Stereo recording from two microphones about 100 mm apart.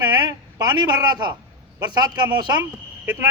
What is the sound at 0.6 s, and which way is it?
Speech, 45° right (ahead or behind).